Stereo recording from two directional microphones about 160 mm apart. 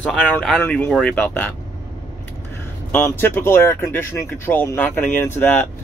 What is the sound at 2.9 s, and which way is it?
Speech, 15° left (ahead or behind).